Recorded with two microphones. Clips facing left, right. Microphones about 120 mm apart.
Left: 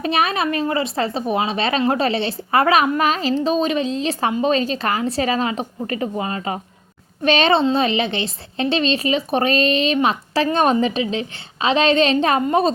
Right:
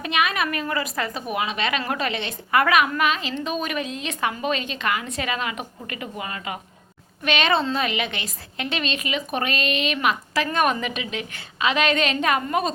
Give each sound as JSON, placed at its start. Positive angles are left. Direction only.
{"t": 0.0, "sound": "a woman's voice", "side_deg": 35}